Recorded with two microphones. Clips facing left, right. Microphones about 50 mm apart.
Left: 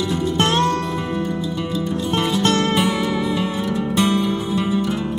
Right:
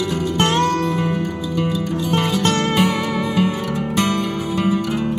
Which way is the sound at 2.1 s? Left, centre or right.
Right.